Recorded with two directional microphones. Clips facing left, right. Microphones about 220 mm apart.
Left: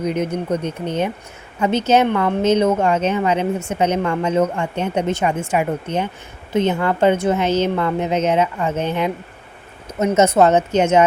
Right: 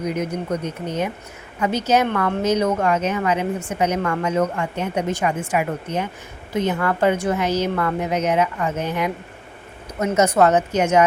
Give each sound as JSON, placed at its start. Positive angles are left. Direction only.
{"t": 0.0, "sound": "a woman's voice", "side_deg": 25}
{"t": 10.2, "sound": "a woman's voice", "side_deg": 25}